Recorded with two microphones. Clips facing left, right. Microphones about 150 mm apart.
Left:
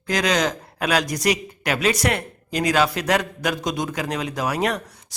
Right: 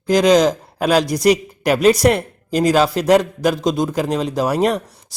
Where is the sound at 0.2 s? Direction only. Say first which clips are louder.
Right 9 dB; 5° right (ahead or behind).